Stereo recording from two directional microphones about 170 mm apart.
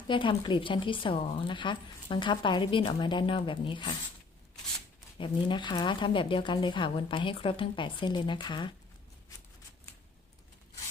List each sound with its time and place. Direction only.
0.1 s speech: 30° left (ahead or behind)
5.1 s speech: 30° left (ahead or behind)